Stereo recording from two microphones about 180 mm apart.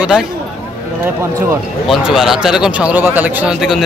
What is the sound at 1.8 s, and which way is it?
Speech, centre (ahead or behind).